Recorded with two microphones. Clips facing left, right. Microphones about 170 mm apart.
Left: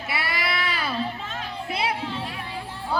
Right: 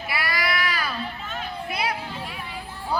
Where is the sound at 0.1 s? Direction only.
25° left (ahead or behind).